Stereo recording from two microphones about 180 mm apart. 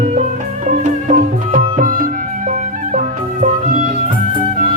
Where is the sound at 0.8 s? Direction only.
45° right (ahead or behind).